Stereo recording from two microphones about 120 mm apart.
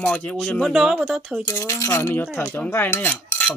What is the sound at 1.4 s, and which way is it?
Speech, 20° left (ahead or behind).